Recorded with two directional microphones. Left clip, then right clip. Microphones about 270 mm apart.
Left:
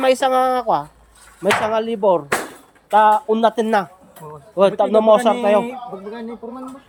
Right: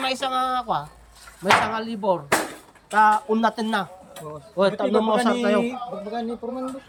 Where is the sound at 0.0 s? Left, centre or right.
Centre.